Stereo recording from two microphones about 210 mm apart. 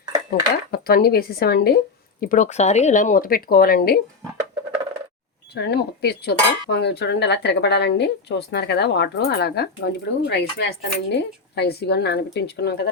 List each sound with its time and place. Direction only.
0.3 s cutlery: 45° left (ahead or behind)
2.2 s speech: 40° left (ahead or behind)
5.5 s cutlery: 50° left (ahead or behind)